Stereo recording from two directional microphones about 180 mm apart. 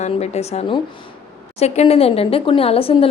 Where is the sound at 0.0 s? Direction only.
35° left (ahead or behind).